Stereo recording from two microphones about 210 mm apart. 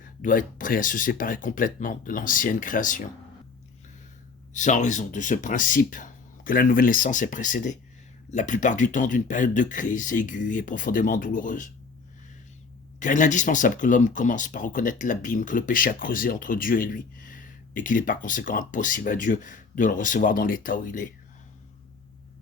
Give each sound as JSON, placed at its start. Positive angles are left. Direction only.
{"t": 0.0, "sound": "speech", "side_deg": 40}
{"t": 4.5, "sound": "speech", "side_deg": 35}
{"t": 13.0, "sound": "speech", "side_deg": 35}